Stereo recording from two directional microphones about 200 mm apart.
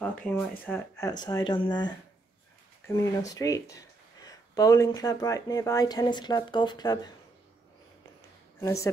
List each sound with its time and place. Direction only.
0.0 s speech: 10° left (ahead or behind)
2.9 s speech: 15° left (ahead or behind)
8.5 s speech: 15° left (ahead or behind)